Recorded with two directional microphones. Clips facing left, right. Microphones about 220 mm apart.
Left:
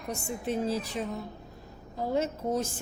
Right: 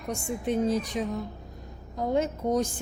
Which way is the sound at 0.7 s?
30° left (ahead or behind).